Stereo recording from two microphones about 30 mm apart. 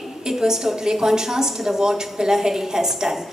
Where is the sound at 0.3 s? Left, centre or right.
Centre.